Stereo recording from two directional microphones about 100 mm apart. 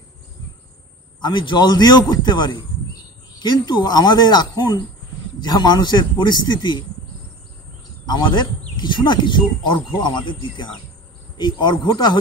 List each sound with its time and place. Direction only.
1.2 s speech: 50° left (ahead or behind)
8.0 s speech: 45° left (ahead or behind)